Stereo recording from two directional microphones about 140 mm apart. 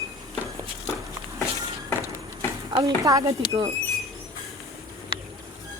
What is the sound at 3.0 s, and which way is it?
Speech, 25° right (ahead or behind).